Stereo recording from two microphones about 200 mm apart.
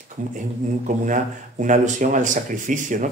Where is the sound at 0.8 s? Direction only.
40° right (ahead or behind).